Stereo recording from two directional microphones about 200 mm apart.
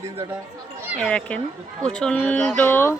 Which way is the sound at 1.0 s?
5° left (ahead or behind).